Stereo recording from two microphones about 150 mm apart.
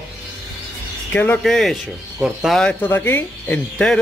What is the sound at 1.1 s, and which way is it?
Speech, 10° left (ahead or behind).